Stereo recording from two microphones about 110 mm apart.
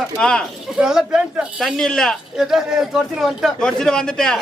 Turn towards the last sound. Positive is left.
turn(degrees=5)  # may be behind; listen again after turning